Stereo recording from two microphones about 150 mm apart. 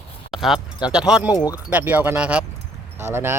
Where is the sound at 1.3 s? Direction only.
25° left (ahead or behind).